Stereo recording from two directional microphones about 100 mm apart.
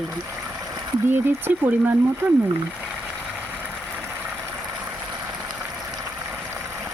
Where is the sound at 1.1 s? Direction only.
20° right (ahead or behind).